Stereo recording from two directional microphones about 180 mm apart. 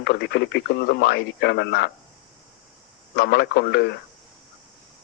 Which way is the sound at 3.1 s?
65° left (ahead or behind).